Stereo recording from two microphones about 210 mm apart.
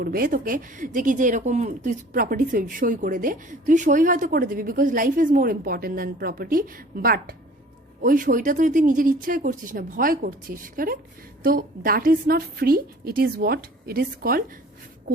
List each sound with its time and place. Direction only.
0.0 s a woman's voice: 45° right (ahead or behind)